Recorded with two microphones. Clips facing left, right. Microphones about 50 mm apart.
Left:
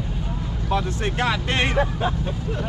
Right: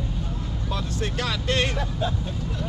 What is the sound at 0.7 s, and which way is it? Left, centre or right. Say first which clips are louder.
Speech: left 6 dB; left.